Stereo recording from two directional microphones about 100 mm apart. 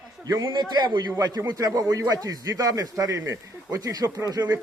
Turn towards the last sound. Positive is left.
turn(degrees=-35)  # may be behind; listen again after turning